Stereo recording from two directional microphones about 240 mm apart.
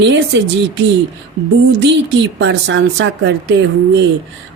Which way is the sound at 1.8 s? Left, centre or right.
Right.